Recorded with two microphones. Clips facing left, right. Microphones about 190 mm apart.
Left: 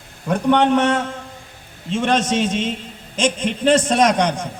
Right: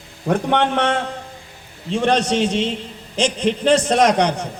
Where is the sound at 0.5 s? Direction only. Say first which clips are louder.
Left 5 dB; 40° left (ahead or behind).